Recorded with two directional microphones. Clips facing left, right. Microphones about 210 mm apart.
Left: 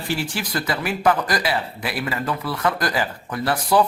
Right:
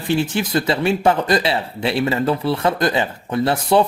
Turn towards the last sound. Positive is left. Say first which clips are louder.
# right 3 dB
turn(degrees=-25)  # may be behind; listen again after turning